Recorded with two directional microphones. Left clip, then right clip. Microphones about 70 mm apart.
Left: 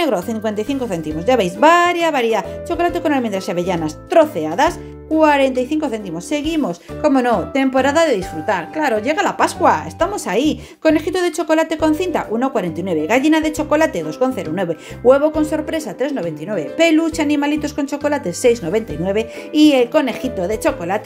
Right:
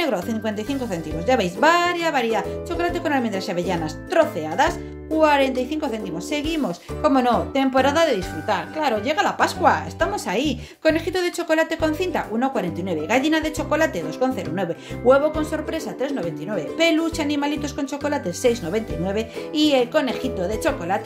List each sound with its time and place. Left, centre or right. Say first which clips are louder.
0.0 s speech: left 5 dB; left
5.2 s a woman's voice: left 4 dB; left